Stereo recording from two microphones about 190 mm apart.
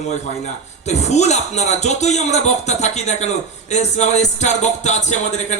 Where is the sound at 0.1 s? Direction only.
35° left (ahead or behind).